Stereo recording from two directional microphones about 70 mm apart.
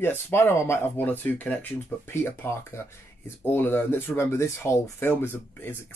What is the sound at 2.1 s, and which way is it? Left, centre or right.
Speech, left.